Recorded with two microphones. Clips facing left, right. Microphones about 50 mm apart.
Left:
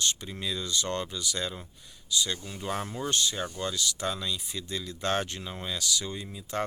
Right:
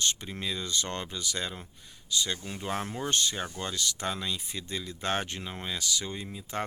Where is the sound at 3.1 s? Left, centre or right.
Right.